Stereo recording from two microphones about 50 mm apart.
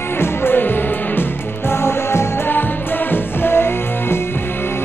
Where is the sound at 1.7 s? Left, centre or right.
Left.